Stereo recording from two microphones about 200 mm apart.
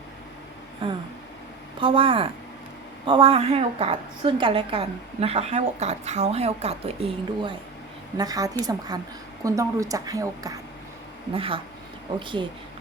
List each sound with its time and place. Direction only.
0.8 s a sound: 25° right (ahead or behind)
1.8 s a woman's voice: 25° right (ahead or behind)
8.2 s a woman's voice: 15° right (ahead or behind)